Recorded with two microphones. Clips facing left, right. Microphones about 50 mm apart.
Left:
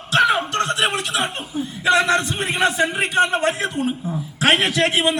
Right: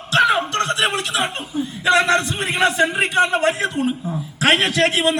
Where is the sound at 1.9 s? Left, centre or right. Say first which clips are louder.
Right 1 dB; right.